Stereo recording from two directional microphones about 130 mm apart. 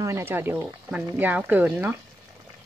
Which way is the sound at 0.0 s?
20° right (ahead or behind).